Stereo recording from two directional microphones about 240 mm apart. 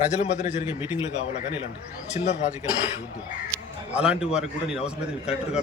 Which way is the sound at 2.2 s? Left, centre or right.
Left.